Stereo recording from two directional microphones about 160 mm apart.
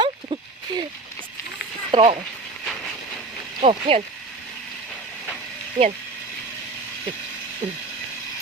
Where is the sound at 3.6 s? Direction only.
35° right (ahead or behind).